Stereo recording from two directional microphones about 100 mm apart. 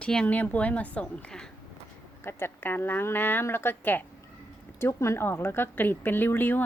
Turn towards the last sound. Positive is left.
turn(degrees=20)  # may be behind; listen again after turning